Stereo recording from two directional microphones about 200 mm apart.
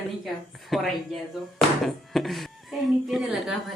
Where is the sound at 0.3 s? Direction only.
Centre (ahead or behind).